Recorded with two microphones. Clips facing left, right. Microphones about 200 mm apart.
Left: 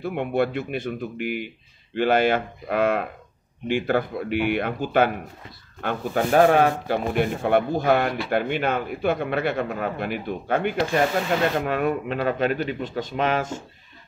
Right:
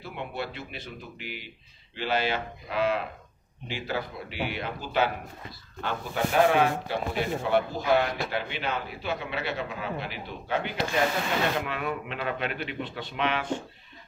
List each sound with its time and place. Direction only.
0.0 s a man's voice: 55° left (ahead or behind)